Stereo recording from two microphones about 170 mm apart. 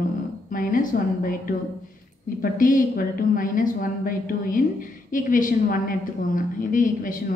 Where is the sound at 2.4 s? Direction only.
55° left (ahead or behind).